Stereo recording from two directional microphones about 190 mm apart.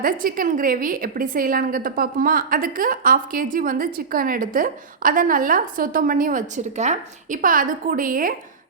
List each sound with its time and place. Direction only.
0.0 s a woman's voice: 50° right (ahead or behind)